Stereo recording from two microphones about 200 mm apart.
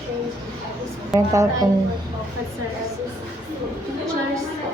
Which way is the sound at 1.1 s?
15° right (ahead or behind).